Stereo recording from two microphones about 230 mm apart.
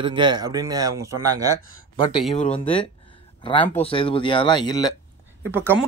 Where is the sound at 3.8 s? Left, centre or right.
Left.